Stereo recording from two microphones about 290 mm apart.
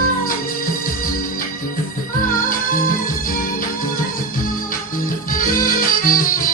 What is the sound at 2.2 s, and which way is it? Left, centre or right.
Music, left.